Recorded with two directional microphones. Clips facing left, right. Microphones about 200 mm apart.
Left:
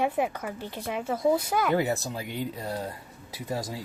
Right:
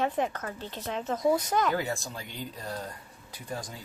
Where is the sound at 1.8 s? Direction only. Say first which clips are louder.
Left 6 dB; 20° left (ahead or behind).